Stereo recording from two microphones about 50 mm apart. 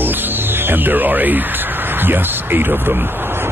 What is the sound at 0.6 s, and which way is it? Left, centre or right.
Speech, right.